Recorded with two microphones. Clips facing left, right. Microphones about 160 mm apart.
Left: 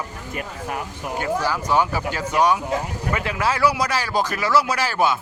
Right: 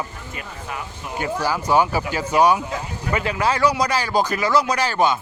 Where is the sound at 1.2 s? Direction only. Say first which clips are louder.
Right 1 dB; 5° right (ahead or behind).